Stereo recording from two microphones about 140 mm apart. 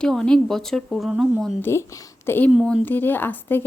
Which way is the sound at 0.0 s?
5° left (ahead or behind).